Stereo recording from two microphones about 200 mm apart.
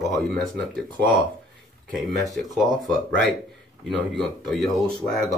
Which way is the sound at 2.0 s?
Centre (ahead or behind).